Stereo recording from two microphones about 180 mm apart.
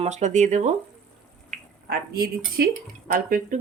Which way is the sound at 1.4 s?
55° right (ahead or behind).